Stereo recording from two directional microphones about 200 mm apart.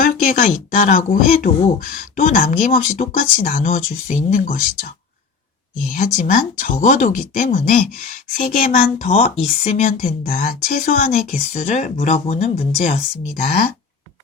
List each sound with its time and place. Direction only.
0.0 s speech: 45° left (ahead or behind)
5.9 s speech: 45° left (ahead or behind)